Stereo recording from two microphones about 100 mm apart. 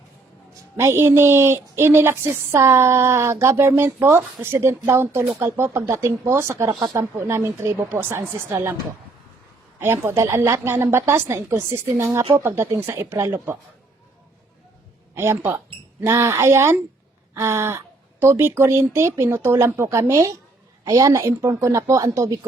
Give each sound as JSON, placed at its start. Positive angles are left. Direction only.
{"t": 0.8, "sound": "a woman's voice", "side_deg": -25}
{"t": 9.7, "sound": "a woman's voice", "side_deg": -25}
{"t": 15.1, "sound": "a woman's voice", "side_deg": -25}